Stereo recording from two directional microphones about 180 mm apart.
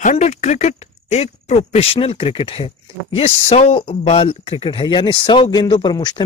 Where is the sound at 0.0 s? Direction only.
40° left (ahead or behind).